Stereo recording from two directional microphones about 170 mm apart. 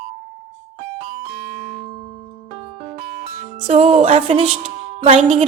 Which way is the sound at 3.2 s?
35° right (ahead or behind).